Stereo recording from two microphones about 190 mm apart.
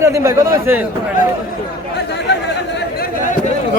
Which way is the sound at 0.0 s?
15° right (ahead or behind).